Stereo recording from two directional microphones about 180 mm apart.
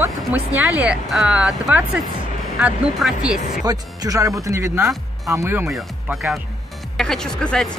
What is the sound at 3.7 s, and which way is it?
Speech, 20° right (ahead or behind).